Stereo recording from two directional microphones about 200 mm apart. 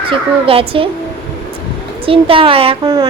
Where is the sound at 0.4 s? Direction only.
25° right (ahead or behind).